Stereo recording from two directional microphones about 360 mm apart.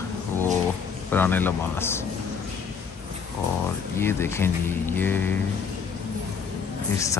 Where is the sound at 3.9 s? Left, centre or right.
Centre.